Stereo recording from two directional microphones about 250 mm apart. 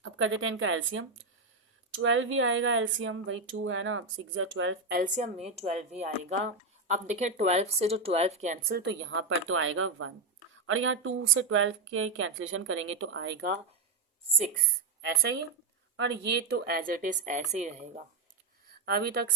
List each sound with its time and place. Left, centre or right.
0.0 s speech: right
16.0 s speech: right
18.9 s speech: right